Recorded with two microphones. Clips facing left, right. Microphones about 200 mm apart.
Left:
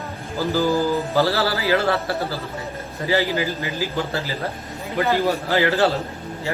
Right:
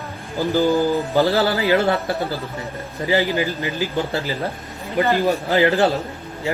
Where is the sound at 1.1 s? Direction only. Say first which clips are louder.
Right 4 dB; 15° right (ahead or behind).